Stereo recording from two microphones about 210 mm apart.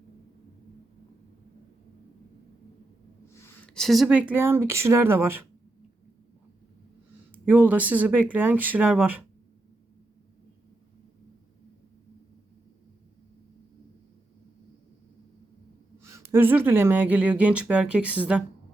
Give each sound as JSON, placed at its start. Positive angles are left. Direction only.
{"t": 3.4, "sound": "speech", "side_deg": 5}
{"t": 7.4, "sound": "speech", "side_deg": -10}
{"t": 16.0, "sound": "a woman's voice", "side_deg": -15}